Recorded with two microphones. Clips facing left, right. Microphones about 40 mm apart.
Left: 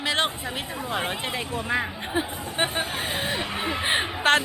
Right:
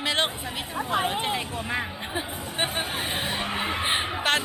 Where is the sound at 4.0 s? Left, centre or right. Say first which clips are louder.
Left 4 dB; left.